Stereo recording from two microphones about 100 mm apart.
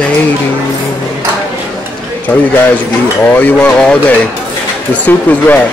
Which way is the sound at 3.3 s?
15° left (ahead or behind).